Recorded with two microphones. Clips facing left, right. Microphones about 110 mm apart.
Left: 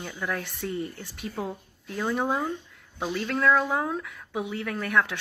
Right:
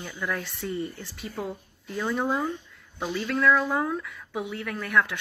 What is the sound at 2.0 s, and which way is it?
Speech, 25° left (ahead or behind).